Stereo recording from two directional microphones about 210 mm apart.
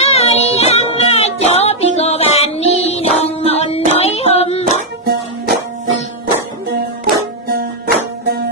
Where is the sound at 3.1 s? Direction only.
30° left (ahead or behind).